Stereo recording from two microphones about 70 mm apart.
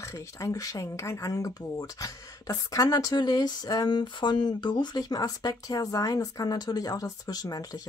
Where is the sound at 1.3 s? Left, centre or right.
Left.